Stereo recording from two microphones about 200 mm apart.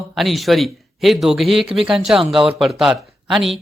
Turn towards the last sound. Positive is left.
turn(degrees=0)  # may be behind; listen again after turning